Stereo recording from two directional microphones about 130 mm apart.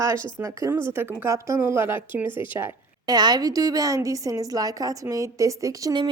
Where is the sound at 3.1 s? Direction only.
30° right (ahead or behind).